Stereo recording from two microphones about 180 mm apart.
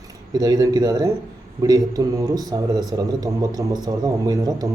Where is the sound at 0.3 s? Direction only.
20° right (ahead or behind).